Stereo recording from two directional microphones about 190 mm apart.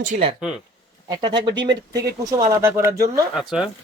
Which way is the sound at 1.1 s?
25° right (ahead or behind).